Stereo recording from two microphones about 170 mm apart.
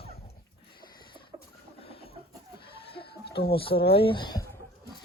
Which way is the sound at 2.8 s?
30° left (ahead or behind).